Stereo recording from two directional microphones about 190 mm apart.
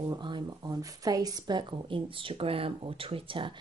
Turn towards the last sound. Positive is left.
turn(degrees=-30)  # may be behind; listen again after turning